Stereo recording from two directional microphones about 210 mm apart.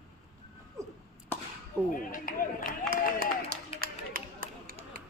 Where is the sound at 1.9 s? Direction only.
40° left (ahead or behind).